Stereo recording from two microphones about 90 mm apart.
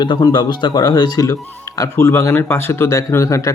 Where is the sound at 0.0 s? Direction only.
50° left (ahead or behind).